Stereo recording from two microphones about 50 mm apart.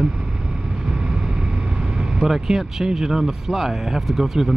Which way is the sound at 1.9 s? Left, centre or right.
Centre.